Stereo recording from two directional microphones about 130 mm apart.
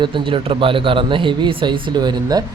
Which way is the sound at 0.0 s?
40° right (ahead or behind).